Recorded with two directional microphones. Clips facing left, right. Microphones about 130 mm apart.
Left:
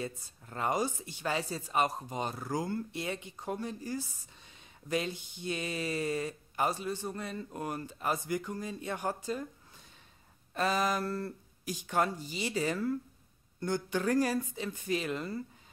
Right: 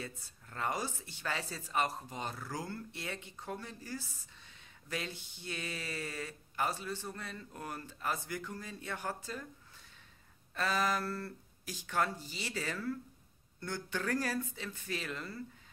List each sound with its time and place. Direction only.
0.0 s speech: 20° left (ahead or behind)
10.5 s speech: 20° left (ahead or behind)